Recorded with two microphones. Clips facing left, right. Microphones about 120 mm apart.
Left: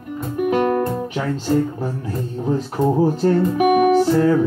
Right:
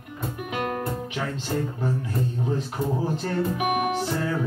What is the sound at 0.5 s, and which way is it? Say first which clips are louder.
Music: left 11 dB; 45° left (ahead or behind).